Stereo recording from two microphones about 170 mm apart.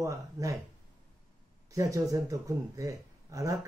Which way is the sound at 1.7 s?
20° right (ahead or behind).